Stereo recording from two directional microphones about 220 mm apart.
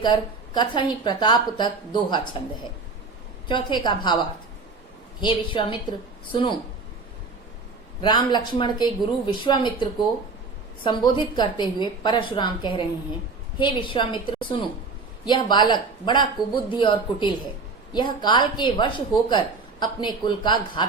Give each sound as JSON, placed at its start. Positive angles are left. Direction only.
{"t": 0.0, "sound": "a woman's voice", "side_deg": 20}
{"t": 3.5, "sound": "a woman's voice", "side_deg": 20}
{"t": 5.2, "sound": "a woman's voice", "side_deg": 20}
{"t": 8.0, "sound": "a woman's voice", "side_deg": 20}